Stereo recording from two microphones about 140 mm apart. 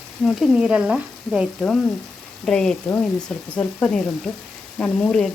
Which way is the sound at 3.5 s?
5° left (ahead or behind).